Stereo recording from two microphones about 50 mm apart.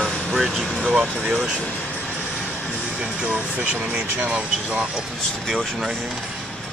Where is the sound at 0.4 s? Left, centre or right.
Centre.